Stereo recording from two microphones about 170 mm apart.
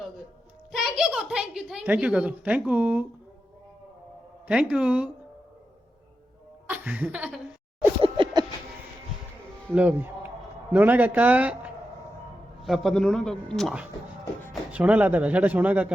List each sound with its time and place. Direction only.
0.7 s a woman's voice: centre (ahead or behind)
4.4 s speech: 5° right (ahead or behind)
6.7 s speech: 10° right (ahead or behind)
8.0 s a sound: 30° right (ahead or behind)
9.6 s a woman's voice: 10° right (ahead or behind)